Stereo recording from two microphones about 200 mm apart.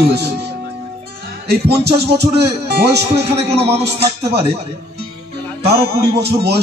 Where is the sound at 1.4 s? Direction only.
55° right (ahead or behind).